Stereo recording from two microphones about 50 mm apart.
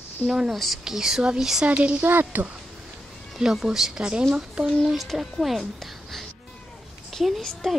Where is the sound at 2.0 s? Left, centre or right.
Right.